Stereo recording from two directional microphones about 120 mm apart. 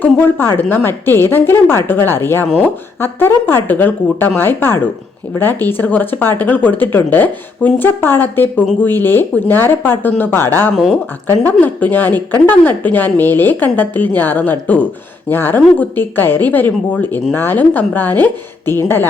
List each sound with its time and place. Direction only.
0.0 s a woman's voice: 15° left (ahead or behind)